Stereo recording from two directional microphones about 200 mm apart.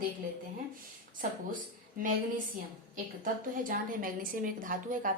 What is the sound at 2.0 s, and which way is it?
Speech, 40° right (ahead or behind).